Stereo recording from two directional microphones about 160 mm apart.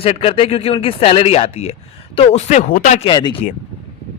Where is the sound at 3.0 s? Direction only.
30° left (ahead or behind).